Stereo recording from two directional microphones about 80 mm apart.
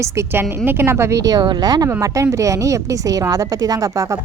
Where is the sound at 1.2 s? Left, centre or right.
Right.